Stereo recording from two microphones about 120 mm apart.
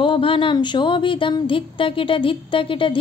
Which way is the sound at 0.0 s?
45° left (ahead or behind).